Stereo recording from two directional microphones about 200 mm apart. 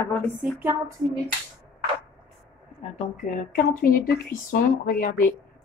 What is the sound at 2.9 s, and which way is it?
Speech, 35° left (ahead or behind).